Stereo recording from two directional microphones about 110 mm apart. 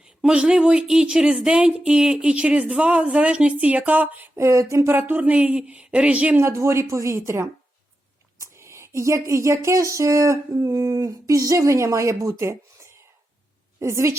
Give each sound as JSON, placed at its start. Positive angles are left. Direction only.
{"t": 0.0, "sound": "speech", "side_deg": -5}
{"t": 4.4, "sound": "speech", "side_deg": -25}
{"t": 6.4, "sound": "a woman's voice", "side_deg": -25}